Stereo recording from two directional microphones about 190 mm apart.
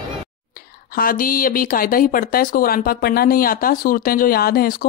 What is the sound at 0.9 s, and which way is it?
Speech, 50° left (ahead or behind).